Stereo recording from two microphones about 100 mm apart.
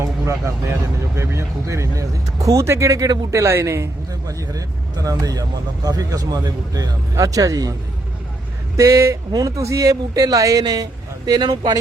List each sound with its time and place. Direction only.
0.0 s speech: 30° right (ahead or behind)
8.7 s speech: 35° right (ahead or behind)